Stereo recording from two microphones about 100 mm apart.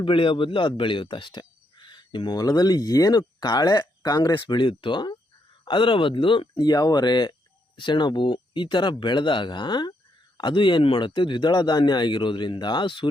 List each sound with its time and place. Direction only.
0.0 s a man's voice: 60° left (ahead or behind)
6.7 s a man's voice: 40° left (ahead or behind); by 13.1 s 55° left (ahead or behind)